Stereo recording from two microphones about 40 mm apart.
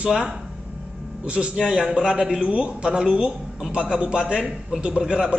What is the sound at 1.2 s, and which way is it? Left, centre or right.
Speech, right.